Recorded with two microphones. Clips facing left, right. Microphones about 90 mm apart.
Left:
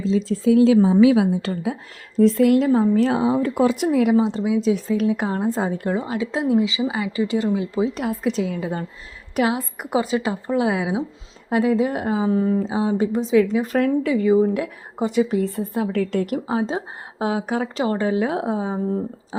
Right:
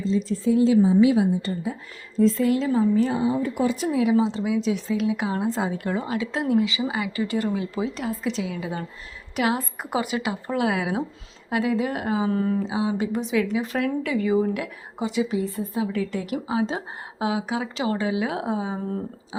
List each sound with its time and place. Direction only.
0.1 s speech: 90° left
2.1 s speech: 70° left (ahead or behind); by 3.0 s 55° left (ahead or behind)
3.0 s speech: 90° left; by 4.1 s 60° left (ahead or behind)
4.2 s a woman's voice: 50° left (ahead or behind); by 6.4 s 30° left (ahead or behind)
6.4 s speech: 20° left (ahead or behind)
7.9 s a woman's voice: 55° left (ahead or behind); by 8.9 s 40° left (ahead or behind)
9.9 s speech: 30° left (ahead or behind)
12.6 s speech: 35° left (ahead or behind)
14.9 s a woman's voice: 50° left (ahead or behind)
18.3 s speech: 30° left (ahead or behind)